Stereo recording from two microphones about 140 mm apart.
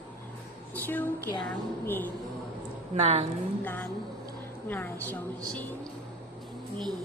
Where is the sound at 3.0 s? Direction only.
50° right (ahead or behind).